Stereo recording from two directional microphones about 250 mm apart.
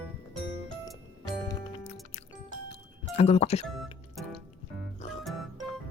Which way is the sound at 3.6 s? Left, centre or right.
Centre.